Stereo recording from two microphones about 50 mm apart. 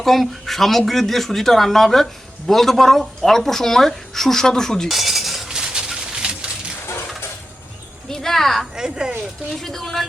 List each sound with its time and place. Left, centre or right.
0.0 s speech: centre
4.9 s cutlery: centre
5.5 s a sound: centre
8.1 s a sound: centre
8.7 s speech: centre
9.5 s speech: centre